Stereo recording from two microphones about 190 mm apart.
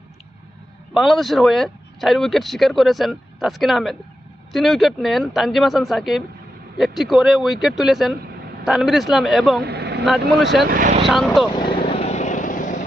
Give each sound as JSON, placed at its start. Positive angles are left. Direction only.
{"t": 0.9, "sound": "speech", "side_deg": 0}
{"t": 9.6, "sound": "vehicle", "side_deg": -60}
{"t": 10.3, "sound": "speech", "side_deg": 0}
{"t": 10.6, "sound": "speech", "side_deg": -50}
{"t": 11.0, "sound": "speech", "side_deg": 0}
{"t": 11.5, "sound": "vehicle", "side_deg": 25}
{"t": 11.9, "sound": "vehicle", "side_deg": 35}